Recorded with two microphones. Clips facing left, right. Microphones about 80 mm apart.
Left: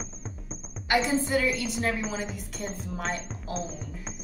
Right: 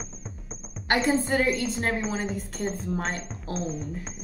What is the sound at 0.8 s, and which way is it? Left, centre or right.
A woman's voice, right.